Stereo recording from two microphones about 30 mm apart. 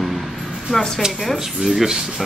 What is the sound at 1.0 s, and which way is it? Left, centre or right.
Speech, centre.